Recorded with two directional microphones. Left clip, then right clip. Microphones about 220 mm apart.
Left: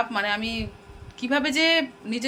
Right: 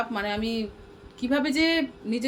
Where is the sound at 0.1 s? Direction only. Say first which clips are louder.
Left 3 dB; 10° right (ahead or behind).